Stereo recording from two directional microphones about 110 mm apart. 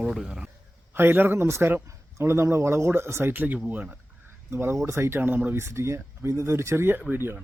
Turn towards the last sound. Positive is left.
turn(degrees=-20)  # may be behind; listen again after turning